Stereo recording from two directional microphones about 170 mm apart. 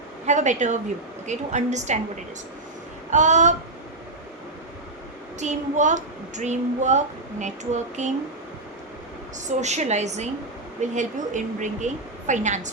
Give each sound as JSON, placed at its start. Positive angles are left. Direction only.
{"t": 0.3, "sound": "speech", "side_deg": -45}
{"t": 3.1, "sound": "speech", "side_deg": -45}
{"t": 5.4, "sound": "speech", "side_deg": -45}
{"t": 9.5, "sound": "speech", "side_deg": -40}